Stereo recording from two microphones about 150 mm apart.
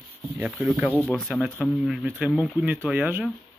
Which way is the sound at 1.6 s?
5° right (ahead or behind).